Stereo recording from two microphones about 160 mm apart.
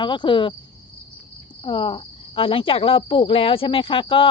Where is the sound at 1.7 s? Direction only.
30° left (ahead or behind).